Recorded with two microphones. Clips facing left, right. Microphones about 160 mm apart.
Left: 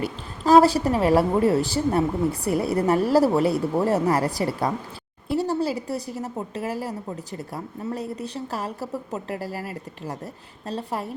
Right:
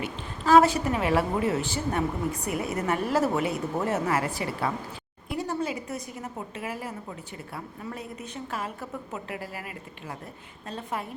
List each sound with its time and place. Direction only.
0.0 s a woman's voice: 35° left (ahead or behind)